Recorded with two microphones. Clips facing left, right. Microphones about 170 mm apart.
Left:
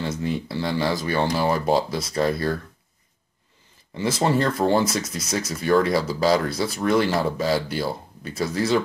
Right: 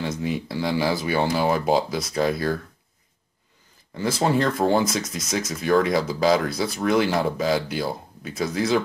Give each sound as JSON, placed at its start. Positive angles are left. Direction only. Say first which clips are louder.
{"t": 0.0, "sound": "speech", "louder": "even", "side_deg": 0}
{"t": 3.9, "sound": "speech", "louder": "even", "side_deg": 0}